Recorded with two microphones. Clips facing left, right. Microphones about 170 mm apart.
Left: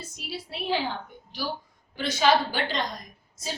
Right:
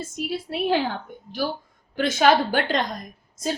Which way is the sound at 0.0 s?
50° right (ahead or behind).